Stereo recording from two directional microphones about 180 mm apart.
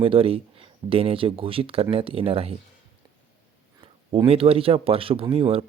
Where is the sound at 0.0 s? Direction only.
30° right (ahead or behind).